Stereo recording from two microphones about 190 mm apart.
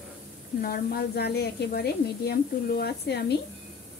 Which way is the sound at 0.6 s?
55° left (ahead or behind).